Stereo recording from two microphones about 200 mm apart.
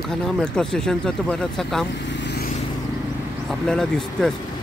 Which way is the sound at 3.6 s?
5° left (ahead or behind).